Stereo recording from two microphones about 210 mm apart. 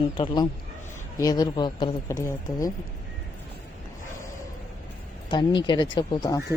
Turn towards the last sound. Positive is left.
turn(degrees=20)  # may be behind; listen again after turning